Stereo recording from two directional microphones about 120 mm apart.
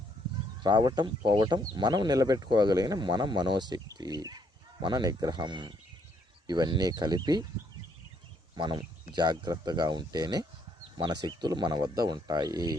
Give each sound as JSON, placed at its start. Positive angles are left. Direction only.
{"t": 0.6, "sound": "speech", "side_deg": -40}
{"t": 8.5, "sound": "speech", "side_deg": -40}